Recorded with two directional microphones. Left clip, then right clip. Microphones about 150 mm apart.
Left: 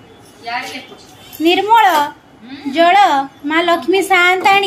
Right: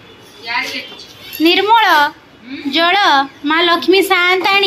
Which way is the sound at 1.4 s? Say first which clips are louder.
Even; 10° left (ahead or behind).